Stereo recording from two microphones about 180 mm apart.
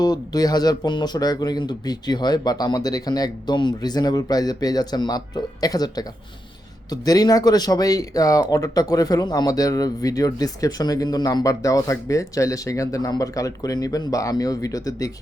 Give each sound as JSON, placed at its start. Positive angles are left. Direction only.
{"t": 0.0, "sound": "speech", "side_deg": 20}